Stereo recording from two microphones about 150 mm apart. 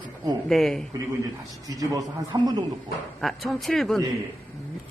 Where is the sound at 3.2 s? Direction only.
Centre (ahead or behind).